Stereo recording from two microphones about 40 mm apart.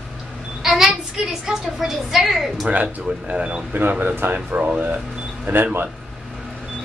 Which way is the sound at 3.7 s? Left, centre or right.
Right.